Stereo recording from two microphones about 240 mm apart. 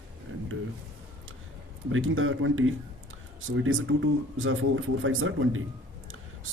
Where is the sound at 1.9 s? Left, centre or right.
Right.